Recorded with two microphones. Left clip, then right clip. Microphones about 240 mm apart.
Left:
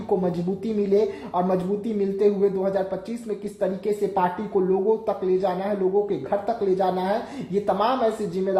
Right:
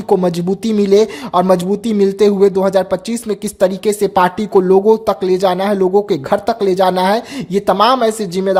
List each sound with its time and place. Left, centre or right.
0.2 s speech: right